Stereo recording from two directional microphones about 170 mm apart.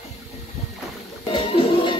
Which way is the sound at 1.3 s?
30° left (ahead or behind).